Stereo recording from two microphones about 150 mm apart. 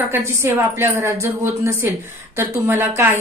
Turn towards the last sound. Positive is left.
turn(degrees=-15)  # may be behind; listen again after turning